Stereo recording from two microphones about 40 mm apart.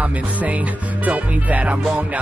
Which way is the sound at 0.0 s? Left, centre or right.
Right.